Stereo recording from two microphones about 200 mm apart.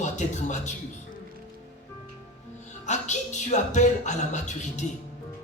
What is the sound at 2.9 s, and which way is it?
Speech, 35° left (ahead or behind).